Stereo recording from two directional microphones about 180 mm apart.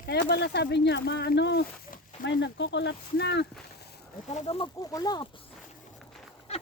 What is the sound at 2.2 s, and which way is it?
Speech, 80° left.